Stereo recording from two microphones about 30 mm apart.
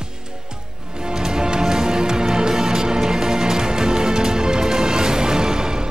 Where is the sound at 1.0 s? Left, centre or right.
Right.